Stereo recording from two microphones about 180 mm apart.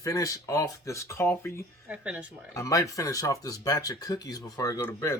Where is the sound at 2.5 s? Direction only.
20° left (ahead or behind).